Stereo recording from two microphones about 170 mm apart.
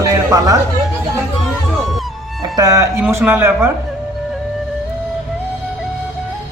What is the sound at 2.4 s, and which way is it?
A man's voice, 20° right (ahead or behind).